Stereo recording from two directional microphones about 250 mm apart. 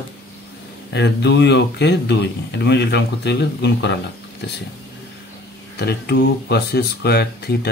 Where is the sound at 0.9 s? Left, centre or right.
Left.